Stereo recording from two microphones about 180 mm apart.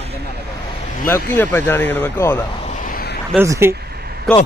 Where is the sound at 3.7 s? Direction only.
60° right (ahead or behind).